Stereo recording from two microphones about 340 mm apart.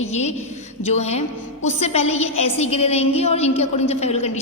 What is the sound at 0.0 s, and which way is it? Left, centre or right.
A woman's voice, centre.